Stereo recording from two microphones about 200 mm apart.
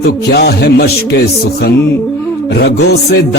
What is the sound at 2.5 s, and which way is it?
Music, 55° left (ahead or behind).